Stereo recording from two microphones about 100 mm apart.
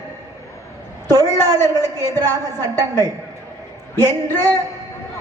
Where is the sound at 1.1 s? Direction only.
35° right (ahead or behind).